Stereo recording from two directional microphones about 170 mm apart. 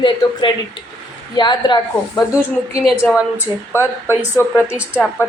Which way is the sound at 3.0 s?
10° left (ahead or behind).